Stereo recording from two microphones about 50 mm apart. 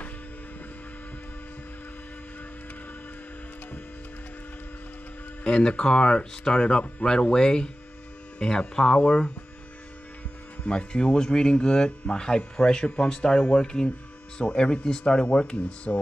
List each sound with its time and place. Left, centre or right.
5.4 s speech: left
10.6 s speech: left